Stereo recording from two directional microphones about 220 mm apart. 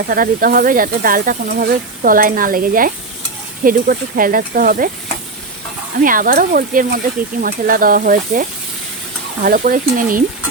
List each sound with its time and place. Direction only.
0.1 s speech: 40° right (ahead or behind)
6.0 s speech: 40° right (ahead or behind)